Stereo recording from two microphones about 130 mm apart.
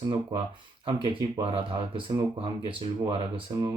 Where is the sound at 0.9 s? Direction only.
40° right (ahead or behind).